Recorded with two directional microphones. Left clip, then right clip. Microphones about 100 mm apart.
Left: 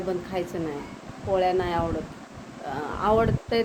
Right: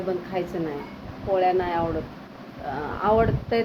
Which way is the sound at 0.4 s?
55° left (ahead or behind).